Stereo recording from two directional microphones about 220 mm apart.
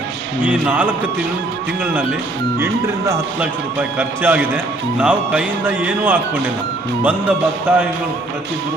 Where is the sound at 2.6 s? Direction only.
10° right (ahead or behind).